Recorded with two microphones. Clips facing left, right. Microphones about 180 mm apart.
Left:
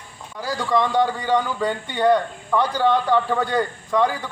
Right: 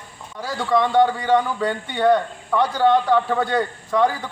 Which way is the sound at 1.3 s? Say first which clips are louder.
Right 2 dB; 5° right (ahead or behind).